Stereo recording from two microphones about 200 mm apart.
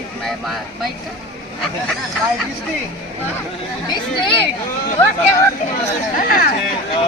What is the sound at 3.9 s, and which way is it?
Speech, 25° left (ahead or behind).